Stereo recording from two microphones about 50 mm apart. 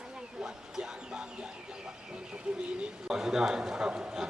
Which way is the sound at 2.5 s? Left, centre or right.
Centre.